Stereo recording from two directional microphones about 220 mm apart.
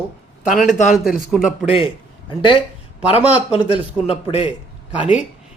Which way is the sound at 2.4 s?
20° left (ahead or behind).